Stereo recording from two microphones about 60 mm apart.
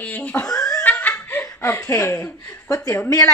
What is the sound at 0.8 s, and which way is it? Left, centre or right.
Laughter, left.